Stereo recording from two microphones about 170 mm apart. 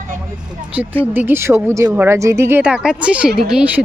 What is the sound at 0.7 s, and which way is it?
Speech, 5° right (ahead or behind).